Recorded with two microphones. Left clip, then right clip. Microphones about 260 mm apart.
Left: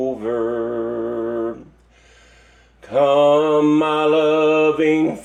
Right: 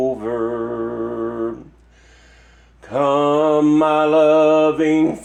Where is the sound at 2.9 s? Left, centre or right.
Right.